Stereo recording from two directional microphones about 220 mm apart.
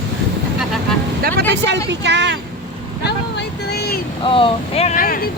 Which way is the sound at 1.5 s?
50° right (ahead or behind).